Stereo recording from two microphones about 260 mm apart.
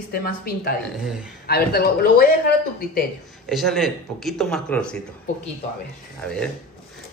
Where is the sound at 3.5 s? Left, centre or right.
Centre.